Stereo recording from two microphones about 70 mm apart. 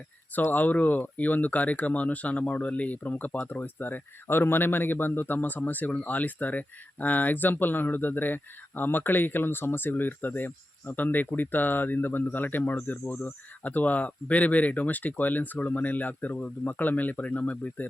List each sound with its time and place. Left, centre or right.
0.5 s speech: left